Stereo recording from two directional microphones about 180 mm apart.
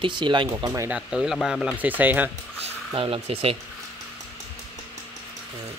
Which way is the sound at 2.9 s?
30° right (ahead or behind).